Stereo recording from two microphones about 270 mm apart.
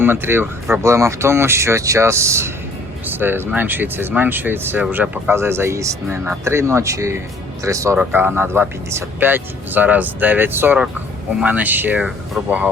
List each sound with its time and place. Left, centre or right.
0.0 s speech: centre